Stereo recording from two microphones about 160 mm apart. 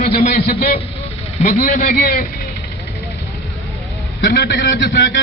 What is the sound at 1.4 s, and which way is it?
Speech, 50° left (ahead or behind).